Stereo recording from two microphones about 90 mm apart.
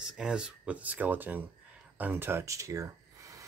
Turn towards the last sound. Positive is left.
turn(degrees=-35)  # may be behind; listen again after turning